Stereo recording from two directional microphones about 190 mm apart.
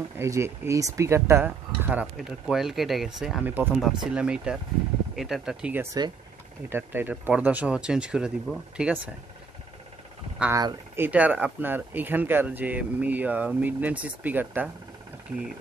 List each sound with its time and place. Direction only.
0.2 s speech: 15° right (ahead or behind)
10.4 s speech: 20° right (ahead or behind)
11.1 s speech: 5° right (ahead or behind)